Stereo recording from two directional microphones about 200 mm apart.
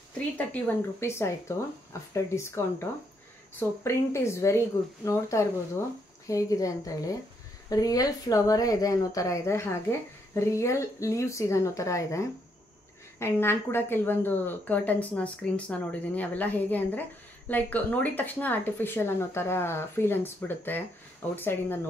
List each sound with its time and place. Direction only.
0.5 s speech: 15° left (ahead or behind)